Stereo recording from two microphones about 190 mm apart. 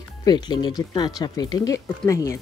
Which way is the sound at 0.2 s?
20° left (ahead or behind).